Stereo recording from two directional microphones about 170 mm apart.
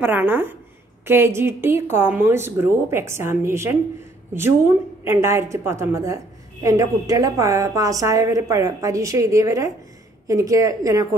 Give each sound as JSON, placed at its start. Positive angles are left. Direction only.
{"t": 0.0, "sound": "a woman's voice", "side_deg": -10}
{"t": 5.0, "sound": "a woman's voice", "side_deg": -15}